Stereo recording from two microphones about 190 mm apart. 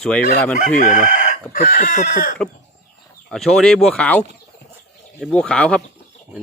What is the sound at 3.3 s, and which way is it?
Speech, centre (ahead or behind).